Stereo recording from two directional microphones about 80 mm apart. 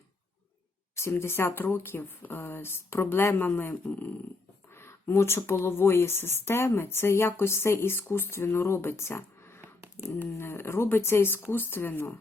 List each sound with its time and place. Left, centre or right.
0.9 s speech: left